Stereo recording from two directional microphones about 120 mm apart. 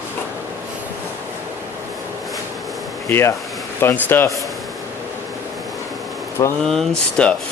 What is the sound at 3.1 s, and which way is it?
Speech, 20° left (ahead or behind).